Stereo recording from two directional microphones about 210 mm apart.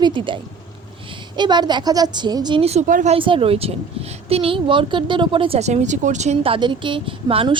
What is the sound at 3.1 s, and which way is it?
A woman's voice, 25° right (ahead or behind).